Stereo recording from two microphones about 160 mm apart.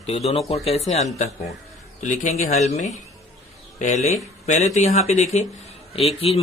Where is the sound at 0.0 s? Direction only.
40° left (ahead or behind).